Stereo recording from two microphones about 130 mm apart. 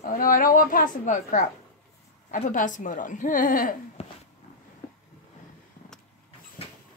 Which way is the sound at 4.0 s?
50° left (ahead or behind).